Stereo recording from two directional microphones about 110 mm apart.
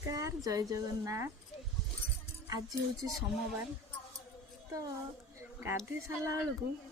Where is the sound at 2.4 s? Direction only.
30° right (ahead or behind).